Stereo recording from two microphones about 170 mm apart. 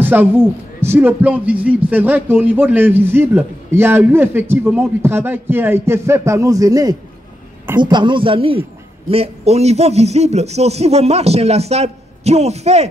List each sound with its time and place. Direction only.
0.0 s a man's voice: 10° right (ahead or behind); by 12.8 s 40° right (ahead or behind)